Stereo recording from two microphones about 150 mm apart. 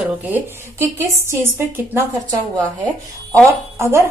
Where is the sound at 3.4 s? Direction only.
20° right (ahead or behind).